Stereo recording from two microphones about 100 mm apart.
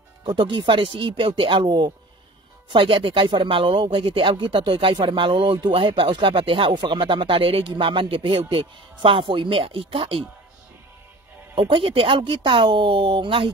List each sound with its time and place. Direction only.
0.2 s speech: 50° right (ahead or behind); by 10.2 s 70° right (ahead or behind)
11.5 s speech: 55° right (ahead or behind)